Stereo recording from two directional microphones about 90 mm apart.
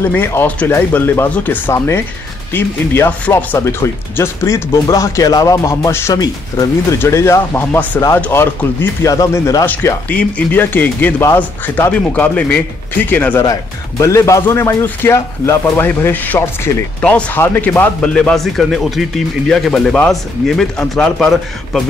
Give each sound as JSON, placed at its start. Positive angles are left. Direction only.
{"t": 0.0, "sound": "speech", "side_deg": 25}
{"t": 1.7, "sound": "speech", "side_deg": 30}
{"t": 3.5, "sound": "speech", "side_deg": 35}
{"t": 9.0, "sound": "speech", "side_deg": 40}
{"t": 10.0, "sound": "speech", "side_deg": 15}
{"t": 13.4, "sound": "speech", "side_deg": 35}